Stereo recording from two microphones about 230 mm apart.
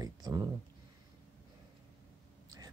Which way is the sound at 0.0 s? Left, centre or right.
Centre.